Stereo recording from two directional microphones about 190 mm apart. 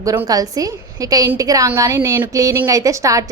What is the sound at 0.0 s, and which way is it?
A woman's voice, 15° right (ahead or behind).